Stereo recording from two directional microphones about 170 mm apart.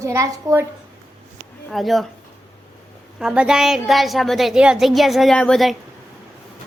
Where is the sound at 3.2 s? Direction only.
5° right (ahead or behind).